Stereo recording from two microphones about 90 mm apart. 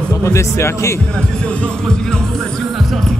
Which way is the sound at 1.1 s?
10° left (ahead or behind).